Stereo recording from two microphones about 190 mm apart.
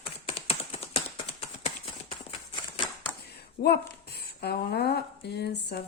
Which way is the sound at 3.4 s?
60° left (ahead or behind).